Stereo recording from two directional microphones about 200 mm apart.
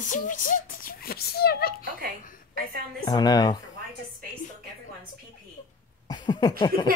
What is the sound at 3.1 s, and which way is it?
Speech, 20° left (ahead or behind).